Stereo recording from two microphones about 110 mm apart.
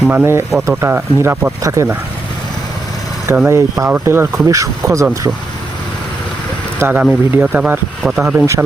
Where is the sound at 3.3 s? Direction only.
20° right (ahead or behind).